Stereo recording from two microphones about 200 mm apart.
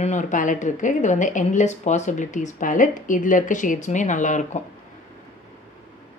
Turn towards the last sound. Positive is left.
turn(degrees=40)  # may be behind; listen again after turning